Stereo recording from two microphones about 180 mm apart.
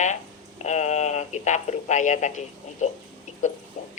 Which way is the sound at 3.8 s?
45° left (ahead or behind).